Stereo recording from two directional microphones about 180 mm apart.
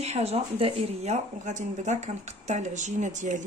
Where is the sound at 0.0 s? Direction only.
35° right (ahead or behind).